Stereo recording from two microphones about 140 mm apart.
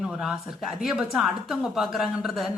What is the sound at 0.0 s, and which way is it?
A woman's voice, 5° right (ahead or behind).